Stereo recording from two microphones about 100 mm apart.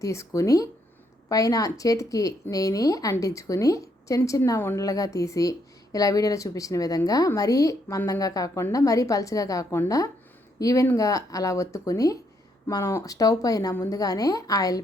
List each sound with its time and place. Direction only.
0.0 s speech: 30° left (ahead or behind)